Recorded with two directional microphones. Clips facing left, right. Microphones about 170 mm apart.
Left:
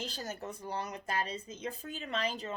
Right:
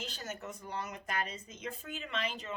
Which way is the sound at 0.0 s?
35° left (ahead or behind).